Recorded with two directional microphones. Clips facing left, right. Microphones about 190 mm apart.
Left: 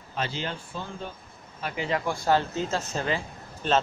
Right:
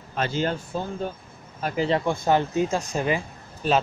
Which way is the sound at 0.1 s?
50° right (ahead or behind).